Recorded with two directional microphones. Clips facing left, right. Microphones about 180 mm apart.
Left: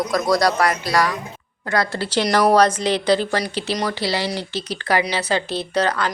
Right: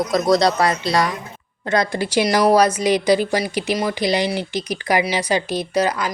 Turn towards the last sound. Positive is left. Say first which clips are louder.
# right 1 dB
turn(degrees=-10)  # may be behind; listen again after turning